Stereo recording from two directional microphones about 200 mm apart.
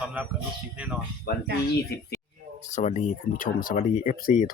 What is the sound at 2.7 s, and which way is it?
Speech, 35° left (ahead or behind).